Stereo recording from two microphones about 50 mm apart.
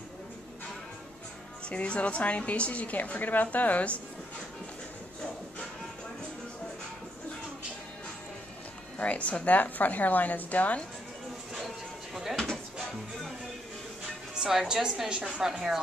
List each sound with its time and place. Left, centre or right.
1.7 s a woman's voice: left
8.9 s a woman's voice: left
11.5 s a sound: centre
14.3 s a woman's voice: centre